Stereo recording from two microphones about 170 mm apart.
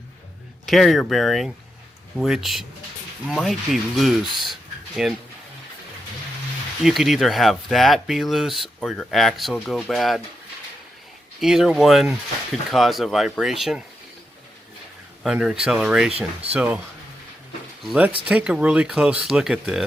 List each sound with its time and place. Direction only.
0.6 s speech: centre (ahead or behind)
6.8 s speech: centre (ahead or behind)
11.3 s speech: centre (ahead or behind)
15.2 s speech: centre (ahead or behind)
17.8 s speech: 10° right (ahead or behind)